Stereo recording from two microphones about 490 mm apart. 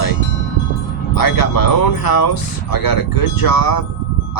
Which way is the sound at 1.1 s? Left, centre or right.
Left.